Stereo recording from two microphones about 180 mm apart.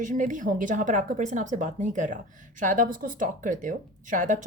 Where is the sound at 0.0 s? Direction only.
45° right (ahead or behind).